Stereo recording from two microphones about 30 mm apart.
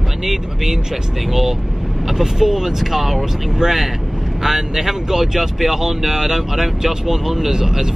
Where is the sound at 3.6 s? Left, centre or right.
Right.